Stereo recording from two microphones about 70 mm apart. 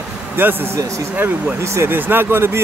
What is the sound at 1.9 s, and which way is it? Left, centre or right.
Speech, right.